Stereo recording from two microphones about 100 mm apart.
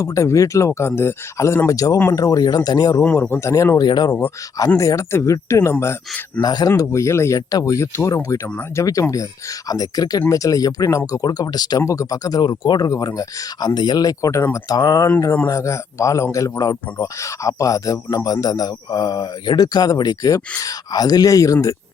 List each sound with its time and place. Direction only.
0.0 s speech: 30° left (ahead or behind)
3.0 s speech: 20° left (ahead or behind)
3.8 s speech: 45° left (ahead or behind)
4.8 s speech: 30° left (ahead or behind)
6.4 s speech: 40° left (ahead or behind)
11.8 s speech: 35° left (ahead or behind)
14.8 s speech: 45° left (ahead or behind)
15.4 s speech: 30° left (ahead or behind)